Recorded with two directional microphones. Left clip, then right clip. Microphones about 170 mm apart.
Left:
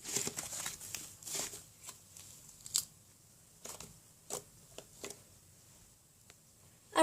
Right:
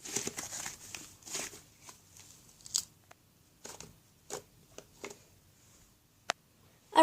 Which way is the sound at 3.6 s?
Centre (ahead or behind).